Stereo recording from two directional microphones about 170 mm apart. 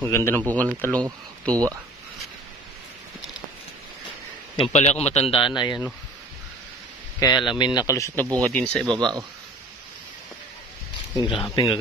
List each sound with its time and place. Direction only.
0.0 s a man's voice: 15° left (ahead or behind)
1.5 s speech: 20° right (ahead or behind)
4.6 s a man's voice: 40° left (ahead or behind)
7.2 s speech: 20° left (ahead or behind)
8.4 s speech: 5° left (ahead or behind)
11.1 s speech: 25° left (ahead or behind)